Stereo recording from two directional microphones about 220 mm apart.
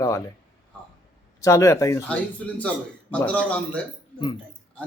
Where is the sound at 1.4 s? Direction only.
15° left (ahead or behind).